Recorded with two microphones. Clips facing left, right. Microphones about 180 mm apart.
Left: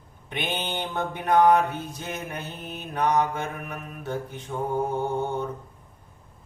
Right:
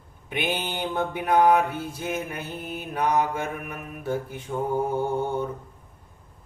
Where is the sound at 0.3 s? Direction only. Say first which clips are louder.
Right 2 dB; 5° right (ahead or behind).